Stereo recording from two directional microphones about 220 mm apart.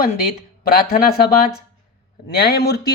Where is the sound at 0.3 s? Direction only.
45° left (ahead or behind).